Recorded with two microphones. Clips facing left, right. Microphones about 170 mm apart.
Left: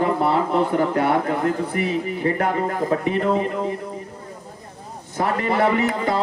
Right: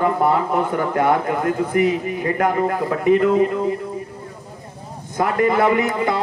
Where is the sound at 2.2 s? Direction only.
35° left (ahead or behind).